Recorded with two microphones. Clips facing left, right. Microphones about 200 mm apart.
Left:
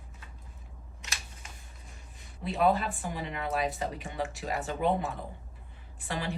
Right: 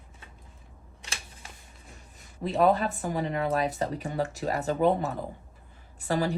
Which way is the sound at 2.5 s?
40° right (ahead or behind).